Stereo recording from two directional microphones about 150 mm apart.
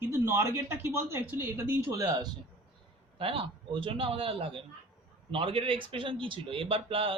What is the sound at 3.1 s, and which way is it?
Speech, 35° right (ahead or behind).